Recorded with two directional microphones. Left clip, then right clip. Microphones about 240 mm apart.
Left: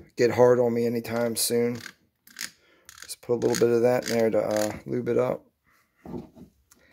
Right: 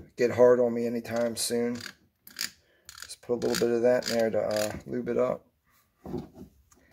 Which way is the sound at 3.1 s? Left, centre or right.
Left.